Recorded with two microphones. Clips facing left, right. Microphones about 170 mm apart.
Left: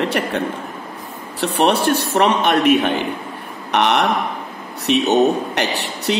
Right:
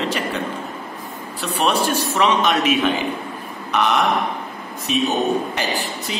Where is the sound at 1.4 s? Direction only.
65° left (ahead or behind).